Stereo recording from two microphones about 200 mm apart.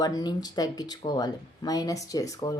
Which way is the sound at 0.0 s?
20° left (ahead or behind).